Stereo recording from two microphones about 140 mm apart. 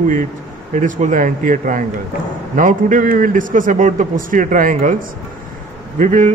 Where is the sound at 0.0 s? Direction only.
65° right (ahead or behind).